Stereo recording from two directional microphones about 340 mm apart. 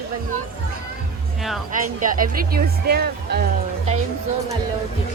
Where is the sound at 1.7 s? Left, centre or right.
Right.